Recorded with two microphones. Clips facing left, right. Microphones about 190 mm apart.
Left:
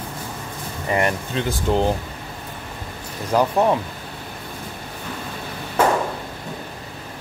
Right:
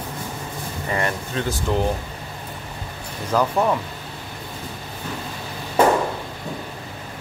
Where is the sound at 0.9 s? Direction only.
20° left (ahead or behind).